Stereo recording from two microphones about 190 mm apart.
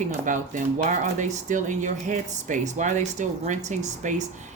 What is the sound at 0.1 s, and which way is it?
Speech, 40° right (ahead or behind).